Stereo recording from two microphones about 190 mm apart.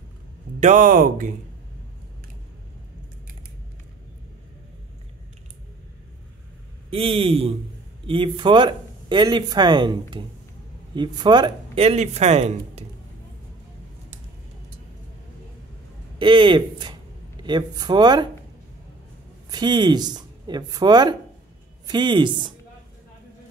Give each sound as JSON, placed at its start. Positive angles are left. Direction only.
{"t": 0.6, "sound": "speech", "side_deg": -40}
{"t": 6.9, "sound": "speech", "side_deg": -30}
{"t": 16.2, "sound": "speech", "side_deg": -25}
{"t": 19.5, "sound": "speech", "side_deg": -25}